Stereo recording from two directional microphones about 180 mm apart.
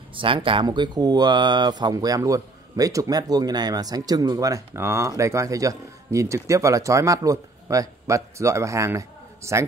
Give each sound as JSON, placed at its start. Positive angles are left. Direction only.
{"t": 0.1, "sound": "speech", "side_deg": -30}